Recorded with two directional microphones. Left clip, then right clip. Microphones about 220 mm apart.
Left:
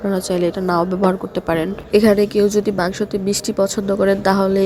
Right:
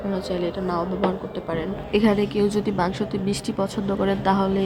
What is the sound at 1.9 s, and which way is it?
A woman's voice, 20° left (ahead or behind).